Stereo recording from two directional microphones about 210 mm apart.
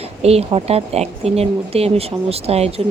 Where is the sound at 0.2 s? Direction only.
30° right (ahead or behind).